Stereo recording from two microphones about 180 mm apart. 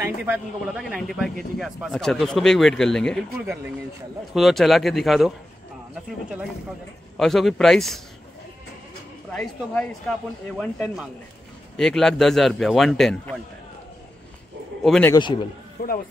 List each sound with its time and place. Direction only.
0.0 s a man's voice: 10° right (ahead or behind)
4.3 s a man's voice: centre (ahead or behind)
7.2 s a man's voice: centre (ahead or behind)
9.3 s a man's voice: 5° left (ahead or behind)
14.8 s speech: centre (ahead or behind)
15.1 s a man's voice: 25° left (ahead or behind)
15.8 s a man's voice: 60° left (ahead or behind)